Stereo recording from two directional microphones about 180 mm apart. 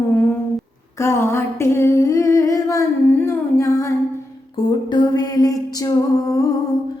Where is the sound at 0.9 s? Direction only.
15° left (ahead or behind).